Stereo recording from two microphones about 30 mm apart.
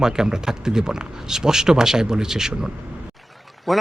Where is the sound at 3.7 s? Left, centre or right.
Centre.